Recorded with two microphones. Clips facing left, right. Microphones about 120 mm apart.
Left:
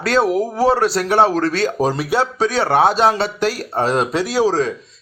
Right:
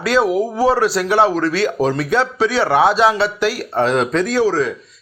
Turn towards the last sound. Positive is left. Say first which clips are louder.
# right 1 dB
turn(degrees=10)  # may be behind; listen again after turning